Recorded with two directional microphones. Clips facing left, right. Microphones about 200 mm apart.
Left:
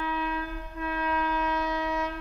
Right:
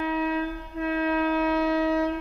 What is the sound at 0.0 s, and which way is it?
Wind instrument, 25° right (ahead or behind).